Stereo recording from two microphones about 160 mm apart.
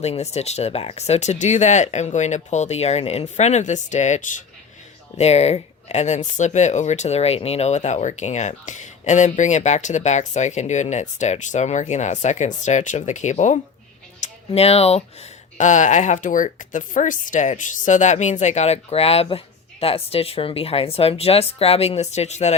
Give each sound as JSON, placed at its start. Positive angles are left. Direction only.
{"t": 0.0, "sound": "speech", "side_deg": 45}